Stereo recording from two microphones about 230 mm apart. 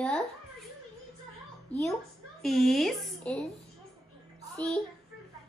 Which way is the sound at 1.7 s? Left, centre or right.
Centre.